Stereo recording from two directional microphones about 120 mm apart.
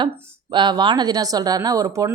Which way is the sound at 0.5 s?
40° right (ahead or behind).